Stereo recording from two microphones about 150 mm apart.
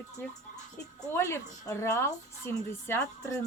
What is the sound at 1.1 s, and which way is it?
A woman's voice, 20° left (ahead or behind).